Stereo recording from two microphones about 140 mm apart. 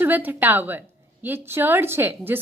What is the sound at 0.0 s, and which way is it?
A woman's voice, 15° right (ahead or behind).